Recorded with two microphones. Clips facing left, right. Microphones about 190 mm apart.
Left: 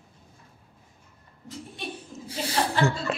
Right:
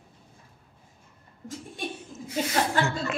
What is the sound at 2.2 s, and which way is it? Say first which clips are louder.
Chuckle: right 1 dB; 30° left (ahead or behind).